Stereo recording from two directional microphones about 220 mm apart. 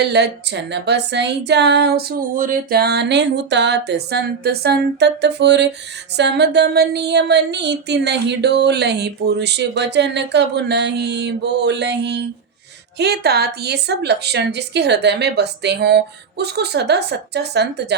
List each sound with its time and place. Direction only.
0.0 s female singing: 50° right (ahead or behind)